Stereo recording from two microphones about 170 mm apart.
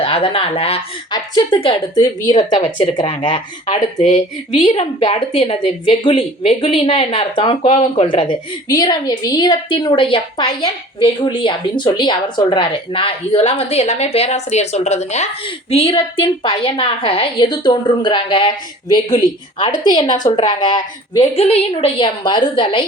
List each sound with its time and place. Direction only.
0.0 s a woman's voice: 30° left (ahead or behind)
3.8 s speech: 50° left (ahead or behind)
4.7 s a woman's voice: 35° left (ahead or behind)
21.2 s a woman's voice: 35° left (ahead or behind)